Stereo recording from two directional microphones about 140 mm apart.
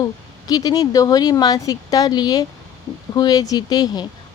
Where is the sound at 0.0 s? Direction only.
25° left (ahead or behind).